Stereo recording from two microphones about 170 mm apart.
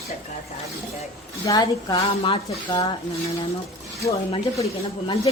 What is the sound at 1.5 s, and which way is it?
A woman's voice, 25° left (ahead or behind).